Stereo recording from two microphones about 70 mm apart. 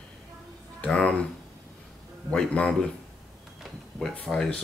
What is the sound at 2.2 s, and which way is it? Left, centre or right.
Speech, centre.